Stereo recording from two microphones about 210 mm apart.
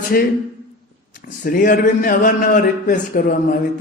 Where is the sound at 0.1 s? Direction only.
45° left (ahead or behind).